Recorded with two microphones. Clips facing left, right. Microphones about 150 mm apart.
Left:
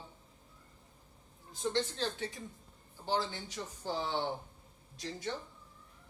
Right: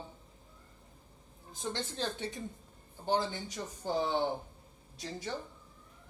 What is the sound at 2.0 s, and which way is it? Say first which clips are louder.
A woman's voice: right 1 dB; 20° right (ahead or behind).